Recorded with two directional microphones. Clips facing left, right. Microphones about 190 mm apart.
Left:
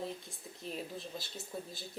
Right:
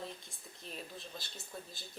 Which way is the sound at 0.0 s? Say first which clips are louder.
Left 5 dB; 5° left (ahead or behind).